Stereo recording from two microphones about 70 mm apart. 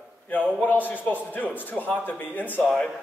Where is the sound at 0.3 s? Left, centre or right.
Left.